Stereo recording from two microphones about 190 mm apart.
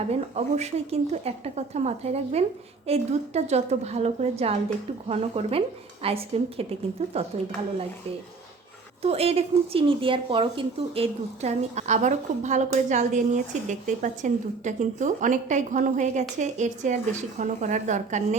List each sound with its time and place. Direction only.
0.1 s speech: 35° right (ahead or behind)
9.0 s speech: 30° right (ahead or behind)